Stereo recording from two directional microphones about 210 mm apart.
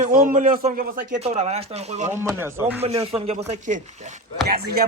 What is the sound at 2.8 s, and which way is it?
Speech, 30° right (ahead or behind).